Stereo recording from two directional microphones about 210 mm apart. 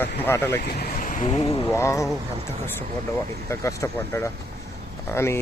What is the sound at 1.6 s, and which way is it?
Speech, 15° left (ahead or behind).